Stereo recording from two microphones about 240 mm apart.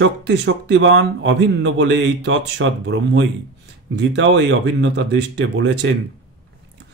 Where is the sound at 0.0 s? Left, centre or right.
Right.